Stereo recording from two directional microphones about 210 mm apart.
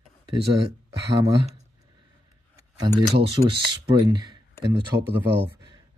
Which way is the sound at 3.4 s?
45° right (ahead or behind).